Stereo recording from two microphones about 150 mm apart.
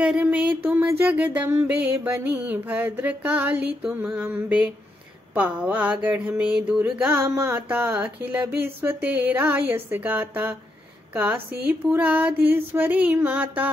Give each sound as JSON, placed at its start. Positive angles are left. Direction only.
{"t": 0.0, "sound": "a sound", "side_deg": -5}
{"t": 0.7, "sound": "music", "side_deg": -10}
{"t": 7.2, "sound": "mantra", "side_deg": -25}
{"t": 7.5, "sound": "music", "side_deg": -10}